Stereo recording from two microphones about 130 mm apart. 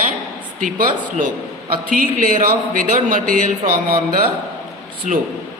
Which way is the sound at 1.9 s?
90° right.